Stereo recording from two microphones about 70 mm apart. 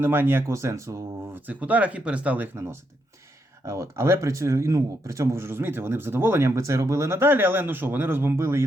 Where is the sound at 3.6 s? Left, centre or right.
Right.